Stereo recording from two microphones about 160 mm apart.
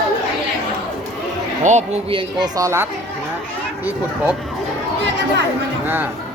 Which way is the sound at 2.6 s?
20° right (ahead or behind).